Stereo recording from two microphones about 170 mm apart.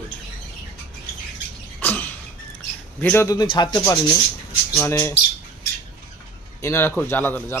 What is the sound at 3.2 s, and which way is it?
Speech, 25° left (ahead or behind).